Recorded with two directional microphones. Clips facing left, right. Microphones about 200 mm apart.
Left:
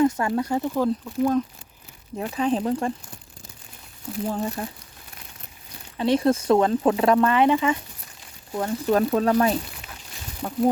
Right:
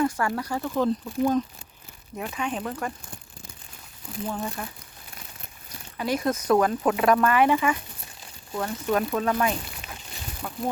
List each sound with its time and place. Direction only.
0.0 s speech: 25° left (ahead or behind)
0.7 s speech: 5° left (ahead or behind)
2.1 s speech: 35° left (ahead or behind)
4.3 s speech: 35° left (ahead or behind)
6.0 s speech: 30° left (ahead or behind)